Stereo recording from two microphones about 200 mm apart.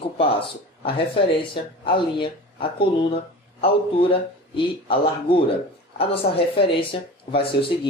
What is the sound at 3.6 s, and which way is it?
Speech, 25° left (ahead or behind).